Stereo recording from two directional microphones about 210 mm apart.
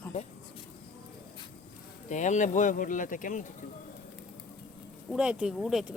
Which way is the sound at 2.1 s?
35° left (ahead or behind).